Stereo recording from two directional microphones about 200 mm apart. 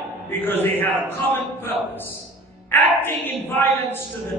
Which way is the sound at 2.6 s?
10° left (ahead or behind).